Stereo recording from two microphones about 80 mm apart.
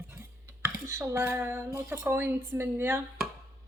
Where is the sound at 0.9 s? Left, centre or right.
Right.